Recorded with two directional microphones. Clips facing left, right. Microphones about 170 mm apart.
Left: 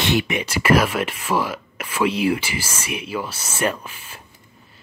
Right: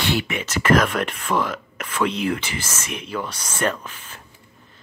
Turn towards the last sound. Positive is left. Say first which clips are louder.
# even
turn(degrees=10)  # may be behind; listen again after turning